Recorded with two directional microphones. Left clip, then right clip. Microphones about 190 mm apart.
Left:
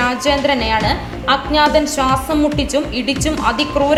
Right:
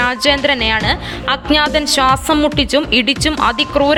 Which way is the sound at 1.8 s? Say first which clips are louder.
Right 3 dB; 60° right (ahead or behind).